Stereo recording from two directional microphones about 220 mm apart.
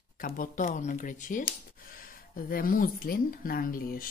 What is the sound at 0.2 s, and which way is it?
Speech, 40° left (ahead or behind).